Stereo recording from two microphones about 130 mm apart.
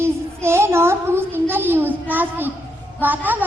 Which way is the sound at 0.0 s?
20° right (ahead or behind).